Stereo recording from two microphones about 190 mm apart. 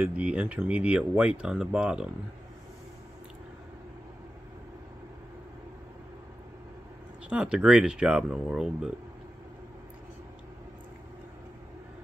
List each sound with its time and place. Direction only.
0.0 s speech: 5° right (ahead or behind)
7.2 s speech: 5° right (ahead or behind)